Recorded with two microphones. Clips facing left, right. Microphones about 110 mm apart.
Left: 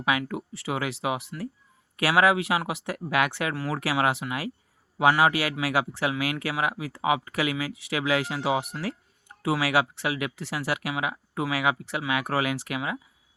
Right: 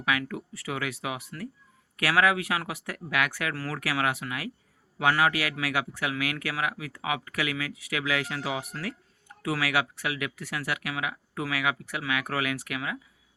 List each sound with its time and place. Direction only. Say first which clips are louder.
0.0 s speech: left 3 dB; 20° left (ahead or behind)